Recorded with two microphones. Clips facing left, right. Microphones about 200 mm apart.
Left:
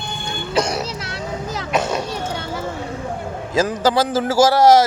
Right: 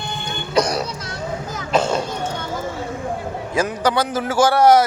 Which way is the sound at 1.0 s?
70° left (ahead or behind).